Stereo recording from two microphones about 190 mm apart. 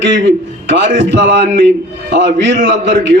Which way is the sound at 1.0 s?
70° right (ahead or behind).